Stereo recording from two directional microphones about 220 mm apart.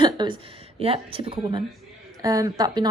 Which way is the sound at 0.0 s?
20° right (ahead or behind).